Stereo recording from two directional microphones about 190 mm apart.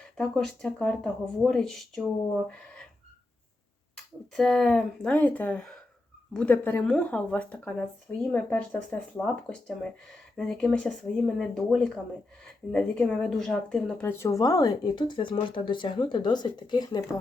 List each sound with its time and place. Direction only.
0.2 s speech: 5° left (ahead or behind)
3.9 s speech: 5° left (ahead or behind); by 17.0 s 20° left (ahead or behind)